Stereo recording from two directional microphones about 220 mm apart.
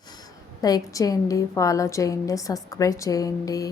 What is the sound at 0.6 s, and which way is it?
A woman's voice, 15° left (ahead or behind).